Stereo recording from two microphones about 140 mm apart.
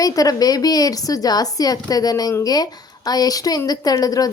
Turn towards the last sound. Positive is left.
turn(degrees=25)  # may be behind; listen again after turning